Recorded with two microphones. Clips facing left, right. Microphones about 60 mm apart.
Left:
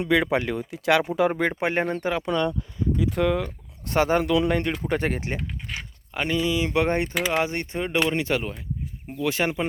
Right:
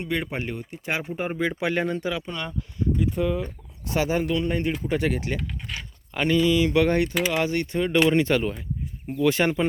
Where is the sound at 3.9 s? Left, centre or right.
Left.